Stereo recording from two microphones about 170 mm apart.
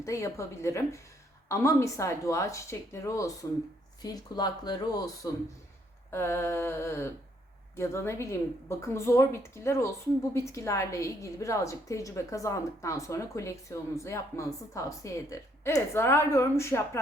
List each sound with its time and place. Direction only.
0.0 s a woman's voice: 15° left (ahead or behind)